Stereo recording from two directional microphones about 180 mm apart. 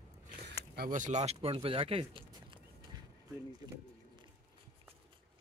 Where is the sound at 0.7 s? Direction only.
50° right (ahead or behind); by 2.6 s 30° right (ahead or behind).